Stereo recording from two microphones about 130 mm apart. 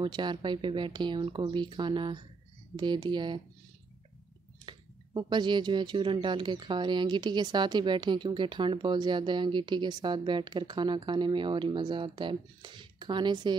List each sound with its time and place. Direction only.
0.0 s speech: 35° right (ahead or behind)
4.6 s speech: 35° right (ahead or behind)